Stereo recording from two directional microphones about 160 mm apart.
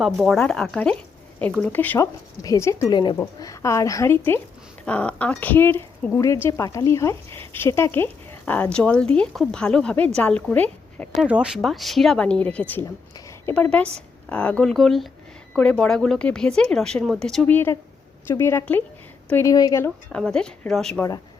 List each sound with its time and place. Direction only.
0.0 s speech: centre (ahead or behind); by 2.9 s 15° left (ahead or behind)
2.9 s a woman's voice: 30° left (ahead or behind); by 11.1 s 10° left (ahead or behind)
11.1 s speech: 5° right (ahead or behind); by 12.8 s 10° left (ahead or behind)
13.1 s a sound: 15° left (ahead or behind)
14.3 s speech: 10° left (ahead or behind)
20.1 s speech: 5° left (ahead or behind)